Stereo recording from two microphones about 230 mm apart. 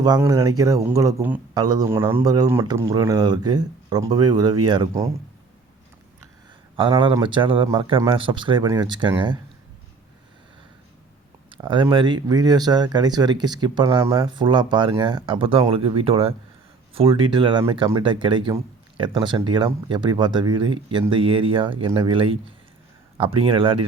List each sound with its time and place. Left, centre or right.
0.0 s speech: centre
6.7 s speech: right
11.5 s speech: right